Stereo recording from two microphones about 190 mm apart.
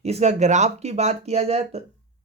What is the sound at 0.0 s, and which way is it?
Speech, 35° right (ahead or behind).